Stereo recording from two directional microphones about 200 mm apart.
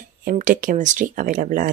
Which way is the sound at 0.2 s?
40° right (ahead or behind).